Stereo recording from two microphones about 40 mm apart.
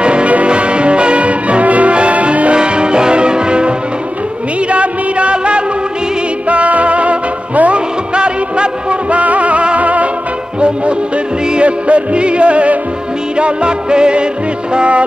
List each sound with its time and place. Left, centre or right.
0.0 s music: right
9.1 s music: right
11.4 s music: right